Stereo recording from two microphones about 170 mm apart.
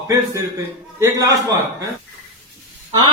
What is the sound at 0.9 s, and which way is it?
Speech, 15° right (ahead or behind).